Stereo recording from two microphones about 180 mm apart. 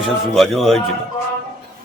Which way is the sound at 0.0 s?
Centre (ahead or behind).